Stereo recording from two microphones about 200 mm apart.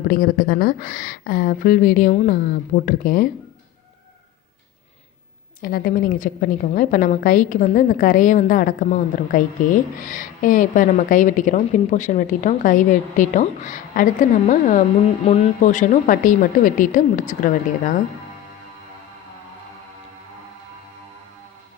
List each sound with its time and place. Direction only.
0.1 s a woman's voice: 45° left (ahead or behind)
5.5 s a woman's voice: 45° left (ahead or behind)